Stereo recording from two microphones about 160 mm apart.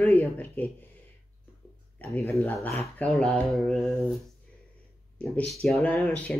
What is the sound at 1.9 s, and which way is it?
Speech, 10° left (ahead or behind).